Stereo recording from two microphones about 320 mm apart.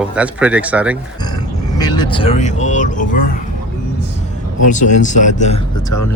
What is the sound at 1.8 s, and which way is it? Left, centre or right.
Speech, centre.